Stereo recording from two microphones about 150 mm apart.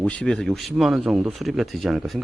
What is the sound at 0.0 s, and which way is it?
Speech, 5° left (ahead or behind).